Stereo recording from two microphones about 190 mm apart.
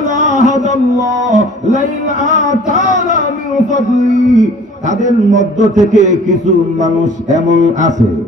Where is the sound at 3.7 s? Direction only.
40° right (ahead or behind).